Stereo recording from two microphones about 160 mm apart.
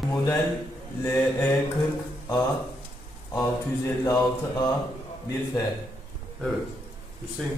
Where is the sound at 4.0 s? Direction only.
25° left (ahead or behind).